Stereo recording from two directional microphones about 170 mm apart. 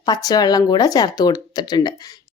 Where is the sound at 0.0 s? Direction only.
20° left (ahead or behind).